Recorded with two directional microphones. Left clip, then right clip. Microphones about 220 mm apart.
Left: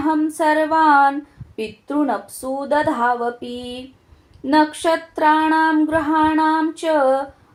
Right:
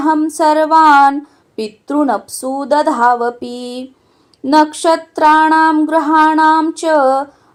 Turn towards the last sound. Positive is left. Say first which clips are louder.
# right 5 dB
turn(degrees=-45)  # may be behind; listen again after turning